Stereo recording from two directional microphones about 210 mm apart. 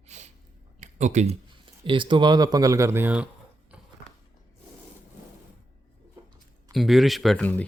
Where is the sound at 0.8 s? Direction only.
35° right (ahead or behind).